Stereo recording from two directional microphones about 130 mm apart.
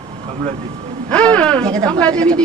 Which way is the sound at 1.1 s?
10° left (ahead or behind).